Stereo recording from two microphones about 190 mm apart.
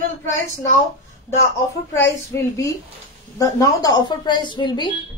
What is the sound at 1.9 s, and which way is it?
A woman's voice, 15° left (ahead or behind).